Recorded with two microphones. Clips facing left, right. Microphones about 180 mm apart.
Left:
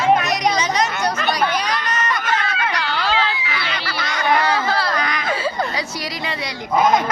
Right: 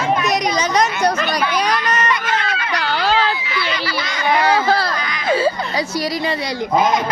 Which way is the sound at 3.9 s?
55° left (ahead or behind).